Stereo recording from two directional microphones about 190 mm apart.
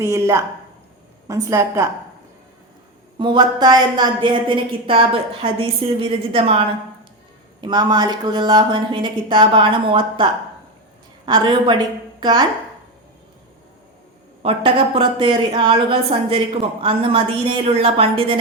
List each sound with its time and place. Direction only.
0.0 s a woman's voice: 15° right (ahead or behind)
3.2 s a woman's voice: 25° right (ahead or behind)
11.3 s a woman's voice: 25° right (ahead or behind)
14.4 s a woman's voice: 30° right (ahead or behind)